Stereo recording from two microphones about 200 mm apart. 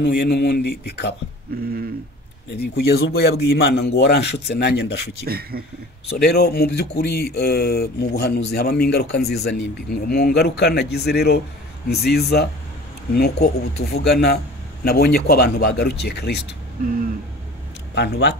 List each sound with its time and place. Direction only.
0.0 s a man's voice: 55° left (ahead or behind)
2.5 s a man's voice: 55° left (ahead or behind)
5.2 s speech: 50° right (ahead or behind)
6.2 s a man's voice: 55° left (ahead or behind)
17.9 s a man's voice: 55° left (ahead or behind)